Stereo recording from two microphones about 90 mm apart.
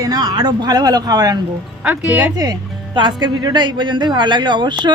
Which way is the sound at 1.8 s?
15° right (ahead or behind).